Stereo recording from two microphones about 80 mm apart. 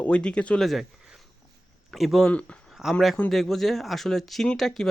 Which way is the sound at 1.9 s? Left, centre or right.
Centre.